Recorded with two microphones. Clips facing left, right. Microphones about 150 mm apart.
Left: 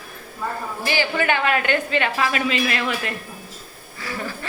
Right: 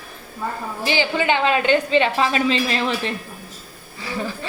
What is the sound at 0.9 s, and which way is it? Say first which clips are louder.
A woman's voice: right 2 dB; 20° right (ahead or behind).